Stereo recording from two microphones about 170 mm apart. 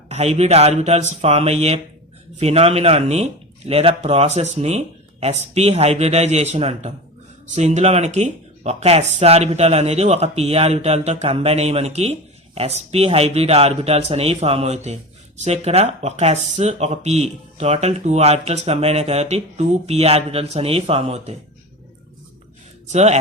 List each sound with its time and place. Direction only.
0.1 s speech: 40° right (ahead or behind)
22.9 s speech: 40° right (ahead or behind)